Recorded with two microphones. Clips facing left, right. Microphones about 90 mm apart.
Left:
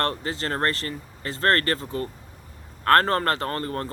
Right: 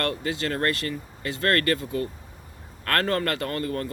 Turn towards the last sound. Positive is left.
turn(degrees=40)  # may be behind; listen again after turning